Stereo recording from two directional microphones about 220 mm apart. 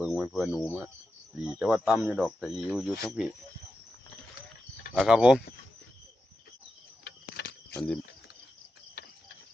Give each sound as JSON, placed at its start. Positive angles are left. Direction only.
{"t": 0.0, "sound": "speech", "side_deg": 0}
{"t": 4.9, "sound": "speech", "side_deg": -5}
{"t": 7.0, "sound": "a sound", "side_deg": 50}
{"t": 7.7, "sound": "speech", "side_deg": 5}